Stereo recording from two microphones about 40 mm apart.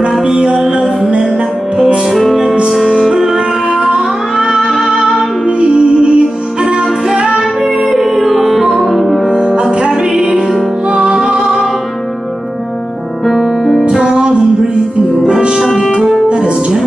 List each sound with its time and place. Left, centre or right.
0.2 s music: right
2.0 s music: centre
2.9 s music: centre
5.6 s music: right
7.9 s music: centre
13.2 s music: centre
13.8 s music: right
15.6 s music: centre
16.3 s music: right